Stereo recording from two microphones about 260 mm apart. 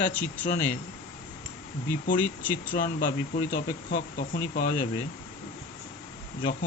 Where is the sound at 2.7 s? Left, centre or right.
Left.